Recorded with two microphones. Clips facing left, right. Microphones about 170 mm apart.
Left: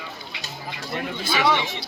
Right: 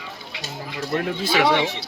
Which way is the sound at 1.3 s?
70° right (ahead or behind).